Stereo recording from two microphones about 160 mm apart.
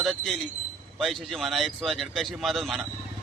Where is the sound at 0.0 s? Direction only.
Centre (ahead or behind).